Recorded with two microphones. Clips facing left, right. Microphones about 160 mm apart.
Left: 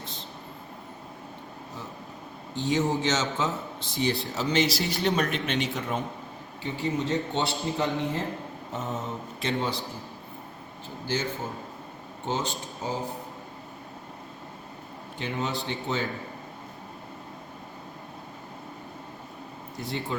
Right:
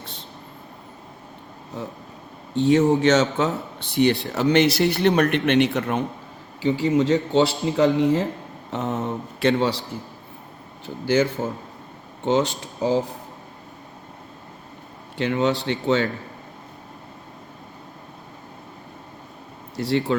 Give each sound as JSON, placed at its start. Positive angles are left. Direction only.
{"t": 2.6, "sound": "a man's voice", "side_deg": -65}
{"t": 6.6, "sound": "a man's voice", "side_deg": -90}
{"t": 8.7, "sound": "speech", "side_deg": -70}
{"t": 11.0, "sound": "a man's voice", "side_deg": -90}
{"t": 15.2, "sound": "speech", "side_deg": -85}
{"t": 19.7, "sound": "speech", "side_deg": -80}